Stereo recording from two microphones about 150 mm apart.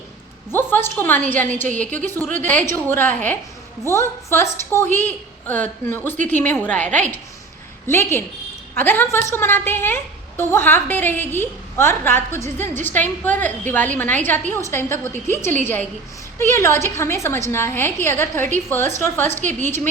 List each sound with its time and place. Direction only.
0.5 s a woman's voice: 15° left (ahead or behind)
1.6 s a woman's voice: 55° right (ahead or behind)
1.9 s a woman's voice: 10° left (ahead or behind)
19.4 s a woman's voice: 55° right (ahead or behind)
19.6 s a woman's voice: 15° left (ahead or behind)